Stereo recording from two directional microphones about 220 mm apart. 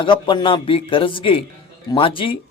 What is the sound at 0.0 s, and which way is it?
Speech, 20° left (ahead or behind).